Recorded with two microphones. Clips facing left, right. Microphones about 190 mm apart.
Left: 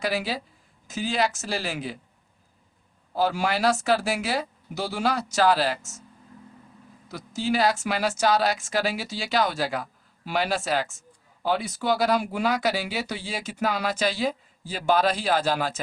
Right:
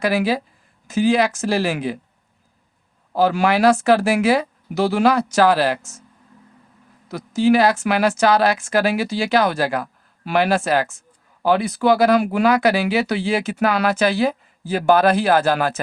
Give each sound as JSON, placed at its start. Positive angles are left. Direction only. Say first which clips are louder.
{"t": 0.0, "sound": "speech", "louder": "right 8 dB", "side_deg": -60}
{"t": 3.1, "sound": "speech", "louder": "right 7 dB", "side_deg": -65}
{"t": 7.1, "sound": "speech", "louder": "right 10 dB", "side_deg": -60}